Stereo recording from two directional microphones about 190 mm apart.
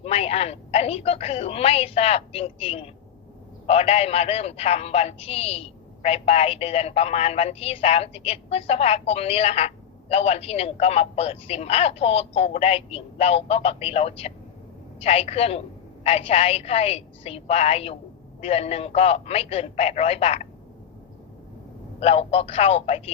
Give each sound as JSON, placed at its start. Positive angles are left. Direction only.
{"t": 0.0, "sound": "a man's voice", "side_deg": 30}
{"t": 22.0, "sound": "a man's voice", "side_deg": 30}